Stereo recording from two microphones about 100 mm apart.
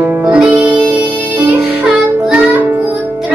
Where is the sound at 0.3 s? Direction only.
15° right (ahead or behind).